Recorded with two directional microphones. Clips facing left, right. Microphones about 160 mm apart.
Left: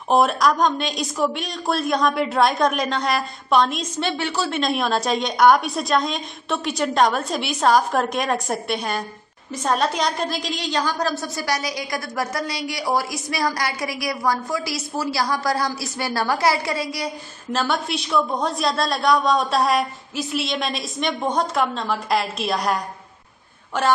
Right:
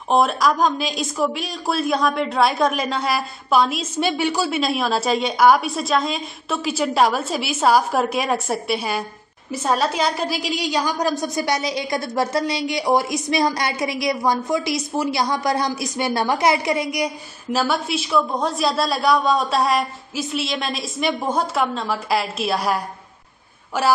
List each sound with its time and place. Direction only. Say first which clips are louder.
0.1 s a woman's voice: even; centre (ahead or behind); by 17.6 s 15° right (ahead or behind)
17.6 s speech: right 2 dB; 5° right (ahead or behind)